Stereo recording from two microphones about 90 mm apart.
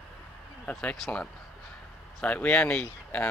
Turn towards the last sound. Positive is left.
turn(degrees=15)  # may be behind; listen again after turning